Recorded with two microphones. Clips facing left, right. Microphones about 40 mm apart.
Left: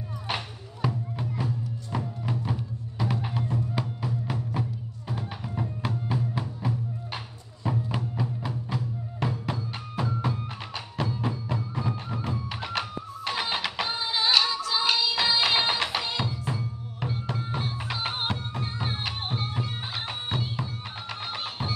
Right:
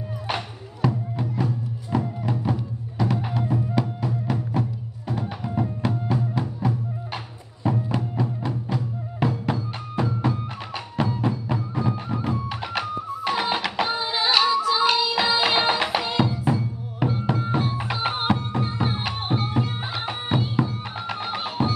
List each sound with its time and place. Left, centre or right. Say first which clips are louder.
0.8 s music: right 5 dB; centre